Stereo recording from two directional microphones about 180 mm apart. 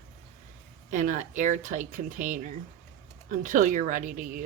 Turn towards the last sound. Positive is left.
turn(degrees=-50)  # may be behind; listen again after turning